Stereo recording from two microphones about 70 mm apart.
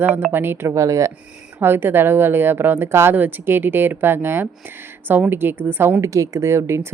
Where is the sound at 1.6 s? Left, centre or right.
Right.